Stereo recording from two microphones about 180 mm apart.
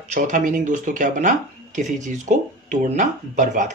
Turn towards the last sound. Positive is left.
turn(degrees=-45)  # may be behind; listen again after turning